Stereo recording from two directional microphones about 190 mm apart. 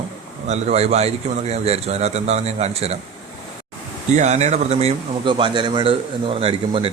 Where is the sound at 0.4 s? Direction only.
35° right (ahead or behind).